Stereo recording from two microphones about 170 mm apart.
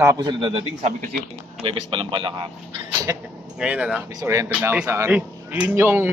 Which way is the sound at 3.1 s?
15° right (ahead or behind).